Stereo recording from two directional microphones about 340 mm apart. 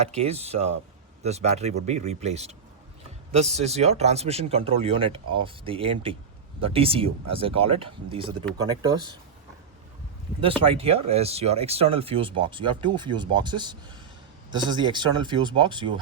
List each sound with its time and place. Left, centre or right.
0.0 s speech: centre
10.7 s speech: centre